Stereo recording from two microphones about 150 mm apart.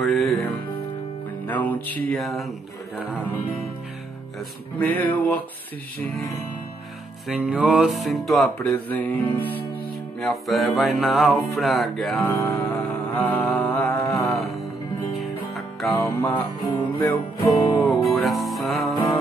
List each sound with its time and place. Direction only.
0.0 s music: centre (ahead or behind)
1.5 s music: 10° left (ahead or behind)
4.7 s music: 10° left (ahead or behind)
8.5 s music: 10° left (ahead or behind)
10.2 s music: centre (ahead or behind)
15.9 s music: 20° left (ahead or behind)
17.5 s music: centre (ahead or behind)